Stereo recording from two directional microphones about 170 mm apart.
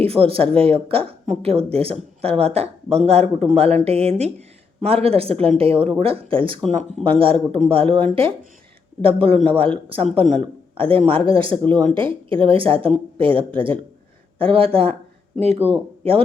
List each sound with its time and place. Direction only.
0.0 s a woman's voice: 35° right (ahead or behind)
11.5 s speech: 10° left (ahead or behind)
11.9 s a woman's voice: 30° right (ahead or behind)